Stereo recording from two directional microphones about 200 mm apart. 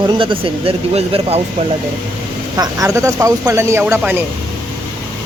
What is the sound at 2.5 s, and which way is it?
Speech, 15° right (ahead or behind).